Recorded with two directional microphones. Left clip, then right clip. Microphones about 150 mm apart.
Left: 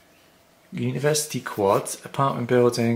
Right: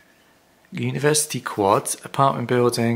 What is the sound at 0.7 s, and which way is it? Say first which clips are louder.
Speech: right 3 dB; 35° right (ahead or behind).